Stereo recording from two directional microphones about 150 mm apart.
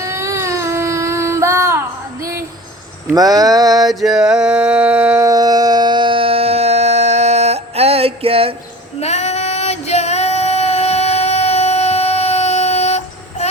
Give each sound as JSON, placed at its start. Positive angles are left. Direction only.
{"t": 0.0, "sound": "a sound", "side_deg": -20}
{"t": 3.2, "sound": "speech", "side_deg": -25}
{"t": 3.8, "sound": "mantra", "side_deg": 0}
{"t": 9.0, "sound": "female singing", "side_deg": 45}